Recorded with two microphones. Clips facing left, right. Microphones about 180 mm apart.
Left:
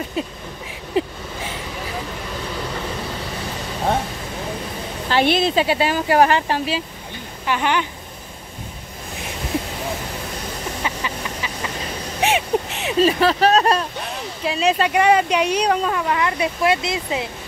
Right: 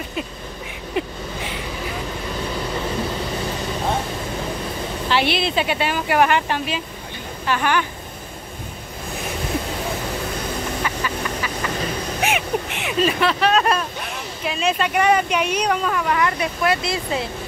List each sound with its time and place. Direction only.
5.1 s speech: 45° left (ahead or behind)
7.4 s speech: 20° left (ahead or behind)
10.8 s vehicle: 20° left (ahead or behind)
12.2 s speech: 35° left (ahead or behind); by 17.3 s 15° left (ahead or behind)